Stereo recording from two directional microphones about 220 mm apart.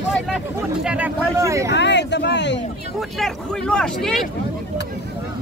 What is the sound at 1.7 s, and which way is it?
Speech, 50° left (ahead or behind).